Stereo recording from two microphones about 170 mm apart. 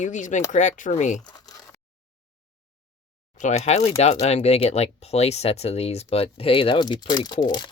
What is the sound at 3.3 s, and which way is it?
Speech, 45° left (ahead or behind).